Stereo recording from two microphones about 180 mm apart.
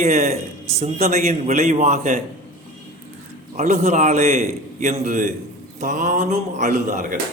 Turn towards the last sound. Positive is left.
turn(degrees=-45)  # may be behind; listen again after turning